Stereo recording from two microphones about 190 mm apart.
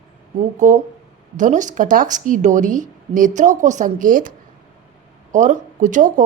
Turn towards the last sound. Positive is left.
turn(degrees=-40)  # may be behind; listen again after turning